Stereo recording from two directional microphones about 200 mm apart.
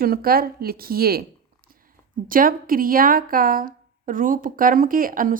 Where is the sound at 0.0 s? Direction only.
50° right (ahead or behind).